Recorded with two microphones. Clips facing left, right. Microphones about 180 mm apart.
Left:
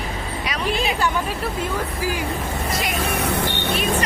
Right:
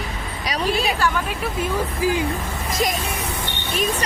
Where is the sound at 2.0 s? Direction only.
20° right (ahead or behind).